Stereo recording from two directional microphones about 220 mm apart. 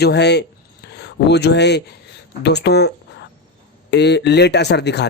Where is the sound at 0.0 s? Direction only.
50° left (ahead or behind).